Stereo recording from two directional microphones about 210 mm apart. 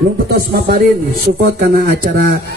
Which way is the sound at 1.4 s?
45° right (ahead or behind).